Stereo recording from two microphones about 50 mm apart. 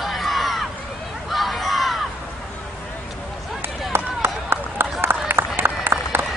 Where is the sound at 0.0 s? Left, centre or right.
Centre.